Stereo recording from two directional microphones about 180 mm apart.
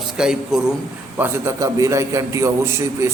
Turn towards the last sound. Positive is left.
turn(degrees=-15)  # may be behind; listen again after turning